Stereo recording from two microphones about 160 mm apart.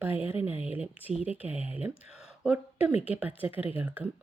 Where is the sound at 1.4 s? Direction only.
10° right (ahead or behind).